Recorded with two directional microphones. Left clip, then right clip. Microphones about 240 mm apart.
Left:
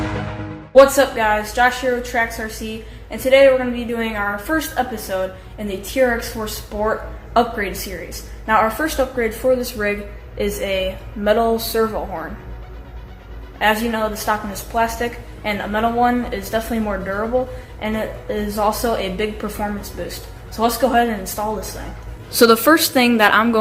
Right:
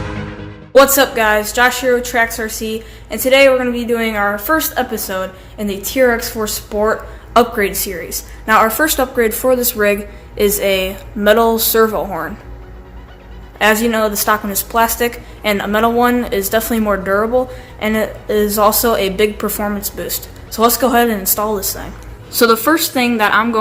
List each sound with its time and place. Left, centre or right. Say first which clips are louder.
0.7 s speech: right 1 dB; right
13.6 s speech: right 5 dB; right
22.3 s a woman's voice: even; centre